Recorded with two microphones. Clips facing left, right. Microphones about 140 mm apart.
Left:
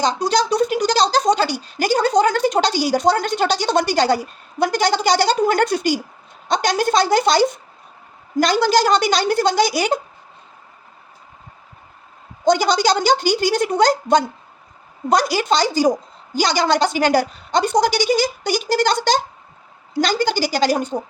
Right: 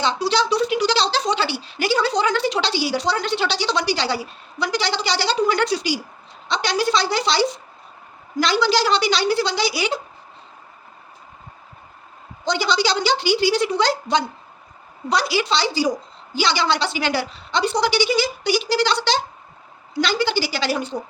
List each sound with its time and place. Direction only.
0.0 s a woman's voice: 45° left (ahead or behind)
12.5 s a woman's voice: 45° left (ahead or behind)